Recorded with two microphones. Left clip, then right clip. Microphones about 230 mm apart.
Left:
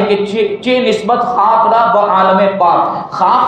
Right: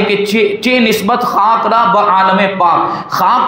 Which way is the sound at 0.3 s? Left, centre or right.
Right.